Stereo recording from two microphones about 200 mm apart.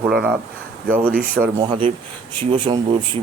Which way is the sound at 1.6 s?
25° right (ahead or behind).